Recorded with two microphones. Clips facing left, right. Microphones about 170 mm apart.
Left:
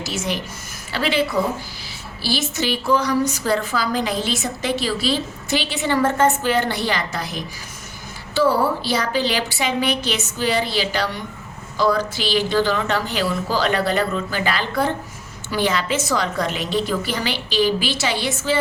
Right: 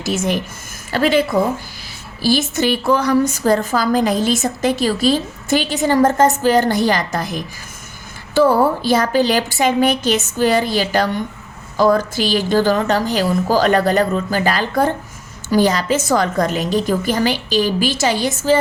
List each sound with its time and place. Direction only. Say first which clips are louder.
0.0 s a woman's voice: right 6 dB; 50° right (ahead or behind)
8.4 s a woman's voice: right 5 dB; 50° right (ahead or behind)